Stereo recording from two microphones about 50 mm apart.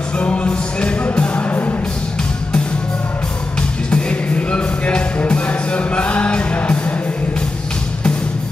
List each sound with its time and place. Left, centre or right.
0.2 s music: left
3.9 s music: left